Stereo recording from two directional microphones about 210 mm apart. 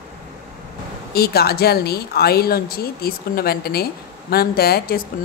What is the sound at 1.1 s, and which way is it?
A woman's voice, 50° left (ahead or behind).